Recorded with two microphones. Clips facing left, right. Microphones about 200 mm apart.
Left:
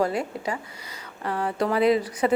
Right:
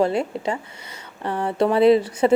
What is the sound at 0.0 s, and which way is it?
Speech, 25° right (ahead or behind).